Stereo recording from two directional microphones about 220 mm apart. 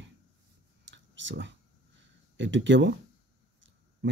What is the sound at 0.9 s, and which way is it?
Clicking, 55° right (ahead or behind).